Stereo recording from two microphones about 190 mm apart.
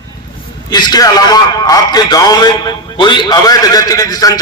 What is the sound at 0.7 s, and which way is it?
A man's voice, 20° left (ahead or behind).